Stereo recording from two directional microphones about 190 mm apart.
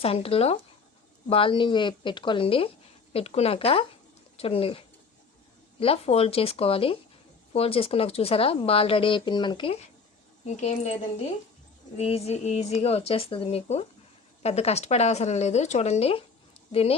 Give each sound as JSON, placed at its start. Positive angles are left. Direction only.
{"t": 0.0, "sound": "speech", "side_deg": 30}